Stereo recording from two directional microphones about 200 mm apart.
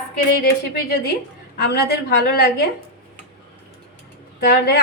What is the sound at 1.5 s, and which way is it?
A woman's voice, 55° left (ahead or behind).